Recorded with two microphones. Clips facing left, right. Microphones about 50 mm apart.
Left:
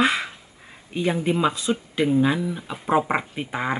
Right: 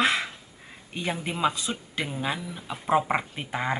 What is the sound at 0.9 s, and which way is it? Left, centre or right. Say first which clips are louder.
Speech: left 8 dB; centre.